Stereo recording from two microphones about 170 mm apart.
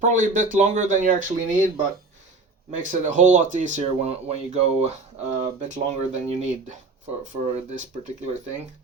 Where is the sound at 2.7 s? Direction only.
50° right (ahead or behind).